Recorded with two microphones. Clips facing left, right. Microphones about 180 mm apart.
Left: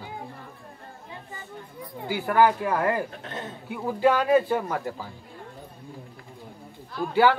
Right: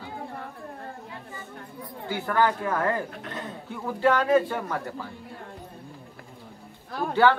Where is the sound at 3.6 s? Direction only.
15° left (ahead or behind).